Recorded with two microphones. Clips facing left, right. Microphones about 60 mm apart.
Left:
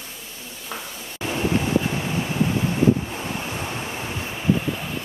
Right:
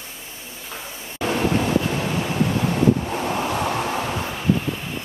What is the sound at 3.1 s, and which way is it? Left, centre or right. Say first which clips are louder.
Waves: right 6 dB; right.